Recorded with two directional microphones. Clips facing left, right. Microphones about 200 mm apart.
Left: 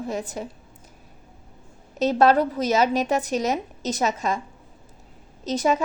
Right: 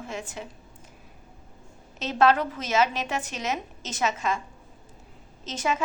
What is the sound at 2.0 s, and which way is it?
A woman's voice, 40° left (ahead or behind).